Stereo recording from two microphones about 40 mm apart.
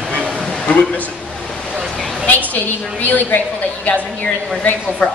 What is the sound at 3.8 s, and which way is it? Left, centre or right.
Speech, left.